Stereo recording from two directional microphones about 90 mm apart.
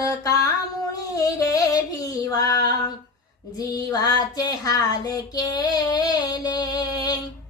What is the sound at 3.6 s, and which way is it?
Music, 45° left (ahead or behind).